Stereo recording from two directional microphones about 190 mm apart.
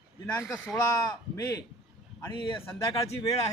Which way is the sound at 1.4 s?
20° left (ahead or behind).